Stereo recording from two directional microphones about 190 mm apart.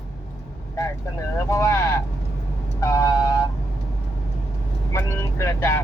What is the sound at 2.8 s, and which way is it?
Vehicle, 15° left (ahead or behind).